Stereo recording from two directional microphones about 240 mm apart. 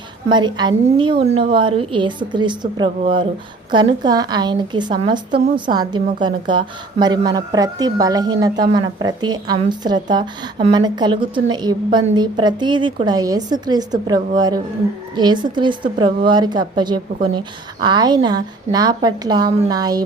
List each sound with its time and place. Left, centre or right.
0.3 s a woman's voice: centre